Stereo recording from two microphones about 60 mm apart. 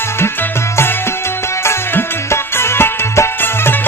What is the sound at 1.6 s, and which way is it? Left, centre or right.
Music, left.